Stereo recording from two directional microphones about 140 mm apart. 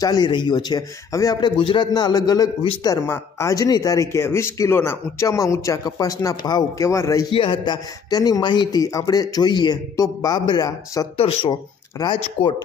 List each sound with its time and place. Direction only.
0.0 s a man's voice: 30° left (ahead or behind)
7.3 s a man's voice: 35° left (ahead or behind)
11.1 s speech: 45° left (ahead or behind)